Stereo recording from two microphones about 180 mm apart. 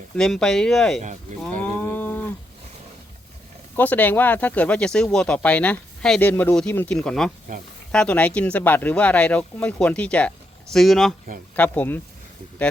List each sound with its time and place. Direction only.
0.2 s speech: 5° left (ahead or behind)
1.0 s speech: 45° right (ahead or behind)
1.6 s moo: 10° left (ahead or behind)
3.8 s speech: 10° left (ahead or behind)